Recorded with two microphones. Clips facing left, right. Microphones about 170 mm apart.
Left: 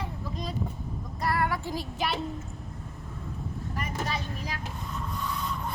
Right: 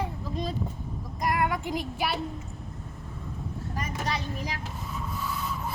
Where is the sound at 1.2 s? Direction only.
15° right (ahead or behind).